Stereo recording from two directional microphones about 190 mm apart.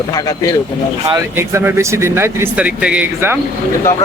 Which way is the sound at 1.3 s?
15° right (ahead or behind).